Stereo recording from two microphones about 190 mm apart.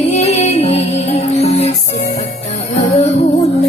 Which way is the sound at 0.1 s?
35° left (ahead or behind).